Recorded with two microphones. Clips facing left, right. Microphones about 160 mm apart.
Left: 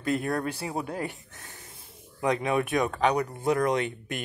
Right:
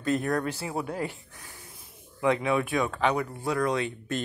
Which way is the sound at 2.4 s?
20° left (ahead or behind).